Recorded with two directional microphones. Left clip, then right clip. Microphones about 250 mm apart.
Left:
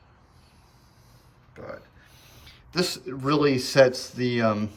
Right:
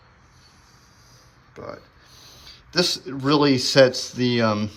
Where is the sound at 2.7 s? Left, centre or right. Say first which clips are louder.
Right 5 dB; centre.